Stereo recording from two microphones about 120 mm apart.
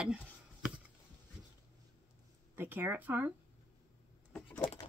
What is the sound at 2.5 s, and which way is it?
Speech, 15° right (ahead or behind).